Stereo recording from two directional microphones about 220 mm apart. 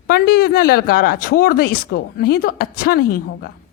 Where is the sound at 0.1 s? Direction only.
45° left (ahead or behind).